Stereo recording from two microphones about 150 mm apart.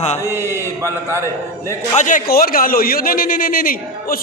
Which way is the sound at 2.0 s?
60° left (ahead or behind).